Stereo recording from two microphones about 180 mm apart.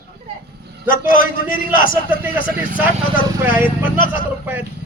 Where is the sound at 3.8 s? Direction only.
50° left (ahead or behind).